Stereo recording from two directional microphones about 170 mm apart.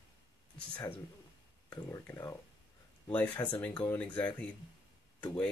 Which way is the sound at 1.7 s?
20° left (ahead or behind).